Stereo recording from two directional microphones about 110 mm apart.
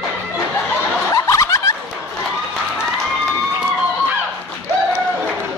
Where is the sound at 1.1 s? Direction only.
30° left (ahead or behind).